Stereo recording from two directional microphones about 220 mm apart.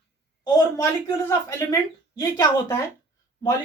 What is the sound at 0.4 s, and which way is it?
Speech, 15° left (ahead or behind).